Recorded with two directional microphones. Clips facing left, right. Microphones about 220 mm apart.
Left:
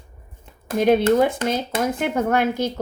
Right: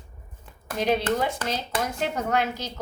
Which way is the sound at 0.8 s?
50° left (ahead or behind).